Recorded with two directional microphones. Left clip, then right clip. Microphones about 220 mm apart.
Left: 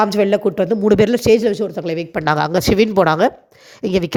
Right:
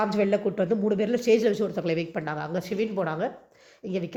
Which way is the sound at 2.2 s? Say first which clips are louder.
Left 15 dB; 50° left (ahead or behind).